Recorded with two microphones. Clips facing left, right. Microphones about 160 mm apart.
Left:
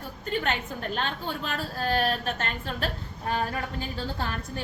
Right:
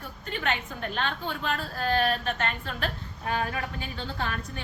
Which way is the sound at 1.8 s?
35° left (ahead or behind).